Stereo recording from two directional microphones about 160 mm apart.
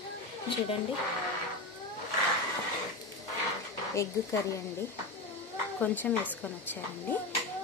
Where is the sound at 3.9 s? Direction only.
20° left (ahead or behind).